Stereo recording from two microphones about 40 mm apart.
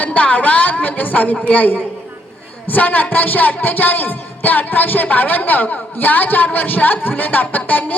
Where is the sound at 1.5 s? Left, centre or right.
Left.